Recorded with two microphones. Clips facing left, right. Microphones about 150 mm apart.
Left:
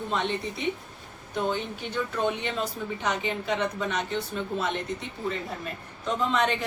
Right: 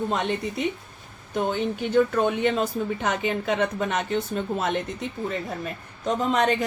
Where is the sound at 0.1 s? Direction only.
45° right (ahead or behind).